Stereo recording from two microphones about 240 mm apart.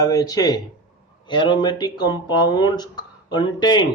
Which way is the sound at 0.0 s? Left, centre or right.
Centre.